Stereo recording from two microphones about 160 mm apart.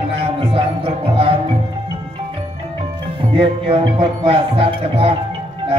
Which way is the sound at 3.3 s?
35° right (ahead or behind).